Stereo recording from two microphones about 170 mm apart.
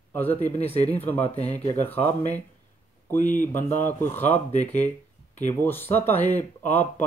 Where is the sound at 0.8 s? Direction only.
10° left (ahead or behind).